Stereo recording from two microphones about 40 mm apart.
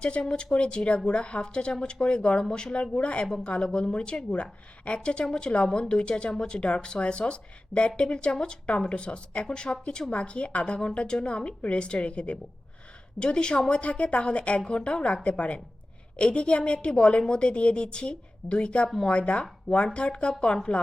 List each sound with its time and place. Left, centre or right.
0.0 s speech: left
13.8 s speech: left